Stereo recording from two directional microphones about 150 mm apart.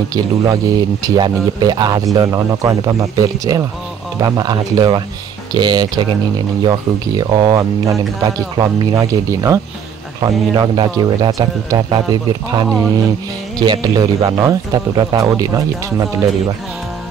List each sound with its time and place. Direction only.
0.1 s a man's voice: 25° right (ahead or behind)